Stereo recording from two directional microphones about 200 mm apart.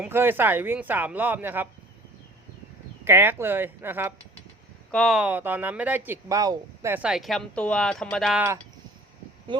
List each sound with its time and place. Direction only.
0.0 s speech: 10° right (ahead or behind)
3.0 s speech: 10° right (ahead or behind)
4.9 s speech: centre (ahead or behind)
9.5 s speech: 25° right (ahead or behind)